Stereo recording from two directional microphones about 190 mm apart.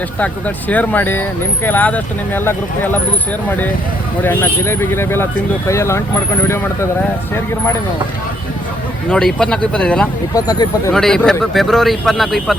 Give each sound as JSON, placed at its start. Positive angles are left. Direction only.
{"t": 0.2, "sound": "speech", "side_deg": 10}
{"t": 4.2, "sound": "speech", "side_deg": 10}
{"t": 9.0, "sound": "speech", "side_deg": 5}
{"t": 10.3, "sound": "speech", "side_deg": 20}
{"t": 10.9, "sound": "speech", "side_deg": 5}